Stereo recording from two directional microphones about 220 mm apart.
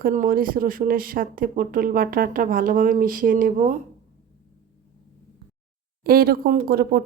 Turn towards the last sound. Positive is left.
turn(degrees=-45)  # may be behind; listen again after turning